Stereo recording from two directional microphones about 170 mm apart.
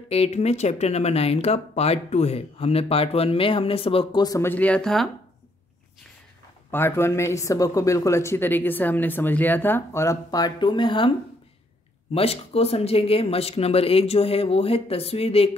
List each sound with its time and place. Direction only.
0.1 s speech: 40° left (ahead or behind); by 5.1 s 5° left (ahead or behind)
6.7 s speech: 15° left (ahead or behind); by 15.5 s 35° left (ahead or behind)